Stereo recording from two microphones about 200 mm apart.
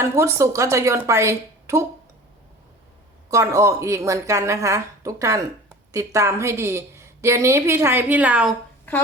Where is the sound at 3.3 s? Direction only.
15° right (ahead or behind).